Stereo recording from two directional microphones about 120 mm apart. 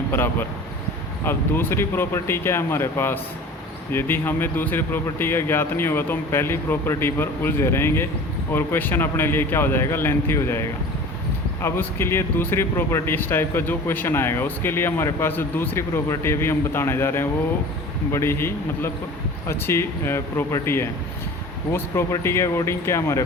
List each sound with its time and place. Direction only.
0.1 s speech: 15° left (ahead or behind)